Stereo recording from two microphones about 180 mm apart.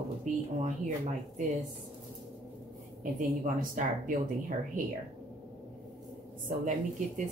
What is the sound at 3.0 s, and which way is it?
Speech, 45° right (ahead or behind).